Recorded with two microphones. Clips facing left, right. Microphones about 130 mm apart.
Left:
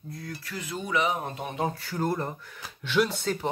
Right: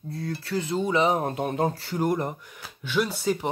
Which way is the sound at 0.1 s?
30° right (ahead or behind).